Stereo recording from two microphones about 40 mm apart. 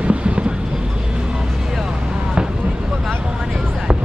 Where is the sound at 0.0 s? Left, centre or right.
Right.